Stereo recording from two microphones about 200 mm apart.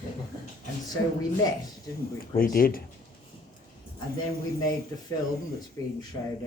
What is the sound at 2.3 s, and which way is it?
Speech, 45° left (ahead or behind).